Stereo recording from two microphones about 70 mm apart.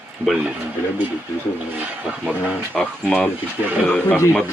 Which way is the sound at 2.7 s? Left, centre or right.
Centre.